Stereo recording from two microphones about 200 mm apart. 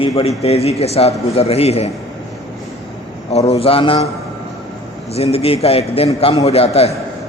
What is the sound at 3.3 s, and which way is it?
Speech, 30° left (ahead or behind).